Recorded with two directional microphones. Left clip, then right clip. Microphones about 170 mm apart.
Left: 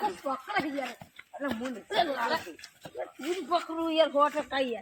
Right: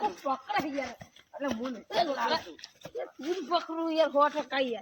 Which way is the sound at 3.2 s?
Centre (ahead or behind).